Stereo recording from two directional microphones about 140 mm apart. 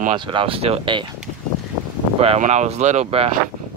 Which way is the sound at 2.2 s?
50° right (ahead or behind).